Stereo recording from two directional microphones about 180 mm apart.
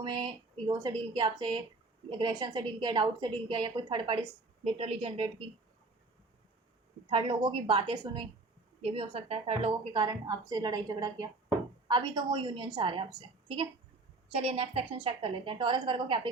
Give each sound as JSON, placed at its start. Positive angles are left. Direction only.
{"t": 0.0, "sound": "a woman's voice", "side_deg": -25}
{"t": 7.1, "sound": "a woman's voice", "side_deg": -30}